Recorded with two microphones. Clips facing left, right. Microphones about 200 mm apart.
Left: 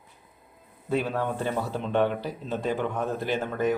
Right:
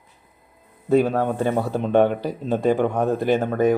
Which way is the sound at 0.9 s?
45° right (ahead or behind).